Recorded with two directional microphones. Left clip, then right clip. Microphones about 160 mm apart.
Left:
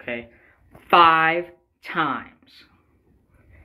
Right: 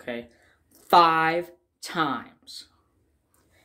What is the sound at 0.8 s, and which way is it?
Speech, 20° right (ahead or behind).